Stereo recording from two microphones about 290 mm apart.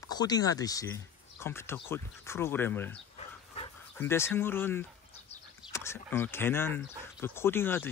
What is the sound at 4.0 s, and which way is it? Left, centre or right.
Speech, centre.